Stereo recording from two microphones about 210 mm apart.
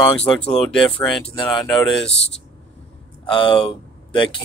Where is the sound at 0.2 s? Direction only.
5° left (ahead or behind).